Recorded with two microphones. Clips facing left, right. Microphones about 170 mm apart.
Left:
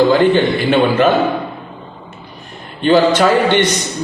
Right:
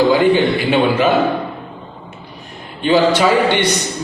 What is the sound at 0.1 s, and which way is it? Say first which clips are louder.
A man's voice: left 1 dB; 10° right (ahead or behind).